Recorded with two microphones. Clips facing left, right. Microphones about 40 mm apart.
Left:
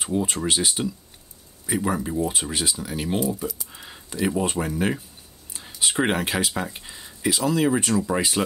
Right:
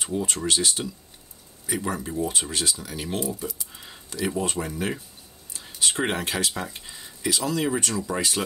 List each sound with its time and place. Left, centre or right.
0.1 s speech: centre
1.7 s speech: centre
6.6 s a sound: centre
7.2 s speech: left